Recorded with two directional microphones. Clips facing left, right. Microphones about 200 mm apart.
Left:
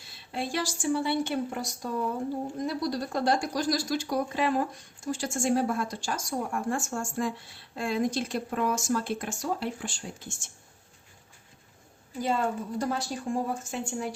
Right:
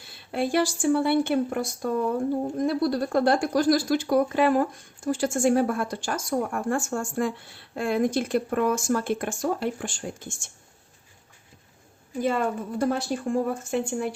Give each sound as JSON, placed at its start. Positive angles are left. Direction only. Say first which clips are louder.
{"t": 0.3, "sound": "speech", "louder": "right 8 dB", "side_deg": -55}
{"t": 12.2, "sound": "speech", "louder": "right 3 dB", "side_deg": -55}